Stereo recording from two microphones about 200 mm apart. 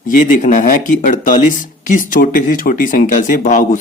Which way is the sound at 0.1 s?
40° left (ahead or behind).